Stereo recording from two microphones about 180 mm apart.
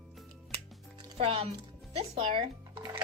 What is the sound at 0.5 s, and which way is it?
Music, 30° right (ahead or behind).